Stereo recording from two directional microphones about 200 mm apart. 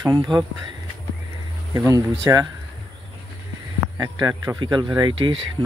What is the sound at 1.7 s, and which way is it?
Speech, 15° right (ahead or behind).